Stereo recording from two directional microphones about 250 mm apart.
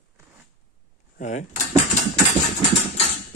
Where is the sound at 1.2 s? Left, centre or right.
Left.